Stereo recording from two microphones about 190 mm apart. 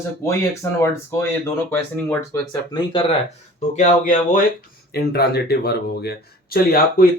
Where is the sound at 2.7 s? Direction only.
25° left (ahead or behind).